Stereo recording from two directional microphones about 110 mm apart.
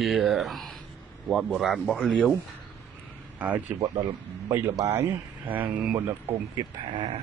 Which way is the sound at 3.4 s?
15° right (ahead or behind).